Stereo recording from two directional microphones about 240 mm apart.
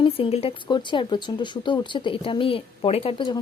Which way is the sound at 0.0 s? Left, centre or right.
Left.